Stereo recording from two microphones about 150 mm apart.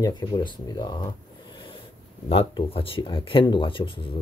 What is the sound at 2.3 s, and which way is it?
Speech, 40° left (ahead or behind).